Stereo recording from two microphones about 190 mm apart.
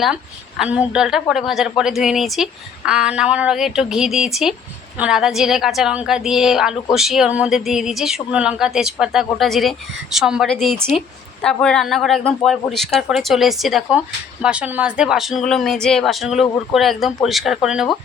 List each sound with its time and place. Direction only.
0.0 s a woman's voice: centre (ahead or behind)